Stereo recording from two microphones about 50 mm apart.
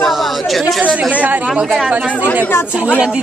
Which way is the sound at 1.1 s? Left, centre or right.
Right.